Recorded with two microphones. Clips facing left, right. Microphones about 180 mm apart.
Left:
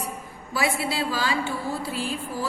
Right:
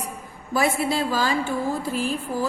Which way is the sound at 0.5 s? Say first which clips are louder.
Right 4 dB; 50° right (ahead or behind).